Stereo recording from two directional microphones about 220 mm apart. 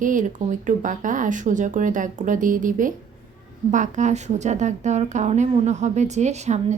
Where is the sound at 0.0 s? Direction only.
35° right (ahead or behind).